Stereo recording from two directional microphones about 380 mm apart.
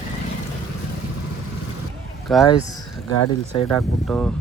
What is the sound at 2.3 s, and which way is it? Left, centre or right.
Speech, centre.